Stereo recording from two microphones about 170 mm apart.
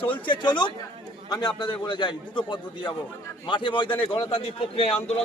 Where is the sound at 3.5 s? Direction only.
30° left (ahead or behind).